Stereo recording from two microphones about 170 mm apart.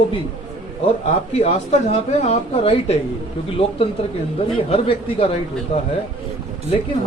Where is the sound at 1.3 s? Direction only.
40° left (ahead or behind).